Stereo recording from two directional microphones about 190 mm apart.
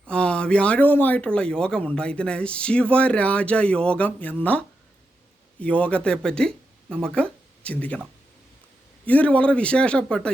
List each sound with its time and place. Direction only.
0.1 s speech: 5° left (ahead or behind)
9.0 s speech: 5° left (ahead or behind)